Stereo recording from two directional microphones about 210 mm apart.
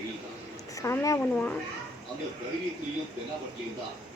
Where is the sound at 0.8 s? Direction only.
15° left (ahead or behind).